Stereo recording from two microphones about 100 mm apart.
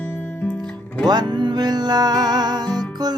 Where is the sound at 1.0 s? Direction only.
45° right (ahead or behind).